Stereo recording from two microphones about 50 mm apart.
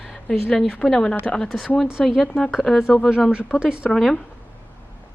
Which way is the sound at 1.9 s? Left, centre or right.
Centre.